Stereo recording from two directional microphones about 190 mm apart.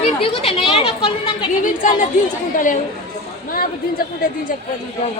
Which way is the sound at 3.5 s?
50° left (ahead or behind).